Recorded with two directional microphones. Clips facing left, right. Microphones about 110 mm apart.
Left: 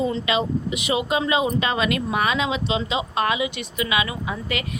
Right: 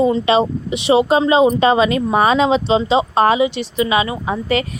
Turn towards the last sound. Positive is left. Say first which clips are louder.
# right 9 dB
turn(degrees=-35)  # may be behind; listen again after turning